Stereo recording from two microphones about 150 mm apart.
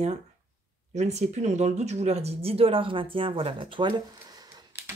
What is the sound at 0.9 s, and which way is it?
Speech, 50° right (ahead or behind).